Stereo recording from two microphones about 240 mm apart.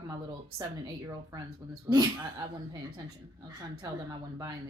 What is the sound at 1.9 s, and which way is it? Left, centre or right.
Speech, centre.